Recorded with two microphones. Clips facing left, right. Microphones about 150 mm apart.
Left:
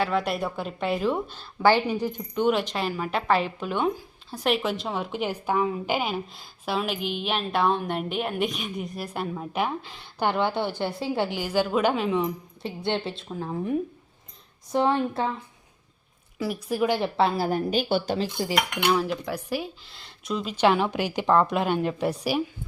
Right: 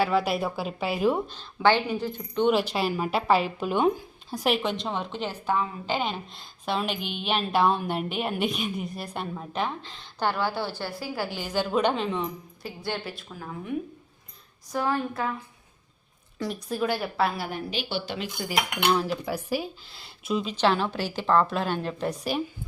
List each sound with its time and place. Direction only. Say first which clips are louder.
0.0 s a woman's voice: right 1 dB; 5° right (ahead or behind)
1.3 s a woman's voice: left 2 dB; 10° left (ahead or behind)
2.5 s a woman's voice: right 1 dB; 5° right (ahead or behind)
4.5 s a woman's voice: left 1 dB; 5° left (ahead or behind); by 11.3 s 25° left (ahead or behind)
11.3 s a woman's voice: right 1 dB; 10° left (ahead or behind)
12.6 s a woman's voice: left 5 dB; 25° left (ahead or behind)
16.4 s a woman's voice: left 3 dB; 10° left (ahead or behind); by 18.3 s 40° left (ahead or behind)
18.9 s a woman's voice: even; centre (ahead or behind)
20.5 s a woman's voice: left 4 dB; 10° left (ahead or behind)